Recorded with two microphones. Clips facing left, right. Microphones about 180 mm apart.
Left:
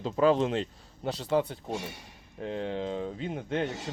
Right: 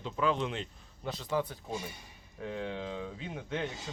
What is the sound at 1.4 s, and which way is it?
Speech, 70° left (ahead or behind).